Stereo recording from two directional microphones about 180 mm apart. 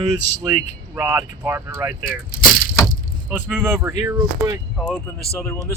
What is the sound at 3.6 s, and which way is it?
Speech, 15° right (ahead or behind).